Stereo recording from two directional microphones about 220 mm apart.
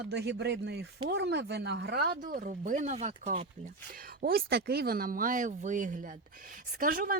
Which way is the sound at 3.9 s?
40° right (ahead or behind).